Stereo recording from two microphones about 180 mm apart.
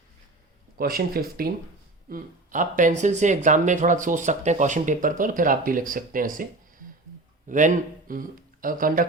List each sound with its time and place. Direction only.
0.8 s speech: 55° right (ahead or behind)